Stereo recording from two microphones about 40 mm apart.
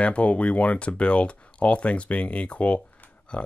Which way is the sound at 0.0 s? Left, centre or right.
Left.